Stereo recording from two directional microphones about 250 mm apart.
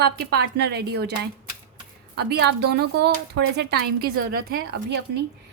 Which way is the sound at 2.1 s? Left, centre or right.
Right.